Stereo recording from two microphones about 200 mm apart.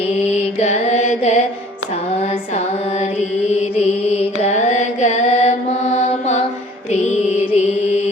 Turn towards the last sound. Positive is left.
turn(degrees=35)  # may be behind; listen again after turning